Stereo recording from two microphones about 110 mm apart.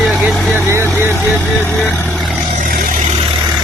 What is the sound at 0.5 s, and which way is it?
Vehicle, 25° right (ahead or behind).